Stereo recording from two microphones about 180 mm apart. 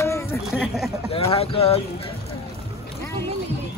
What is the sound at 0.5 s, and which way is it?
Speech, centre (ahead or behind).